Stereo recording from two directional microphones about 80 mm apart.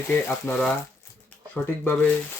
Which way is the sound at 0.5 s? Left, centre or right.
Centre.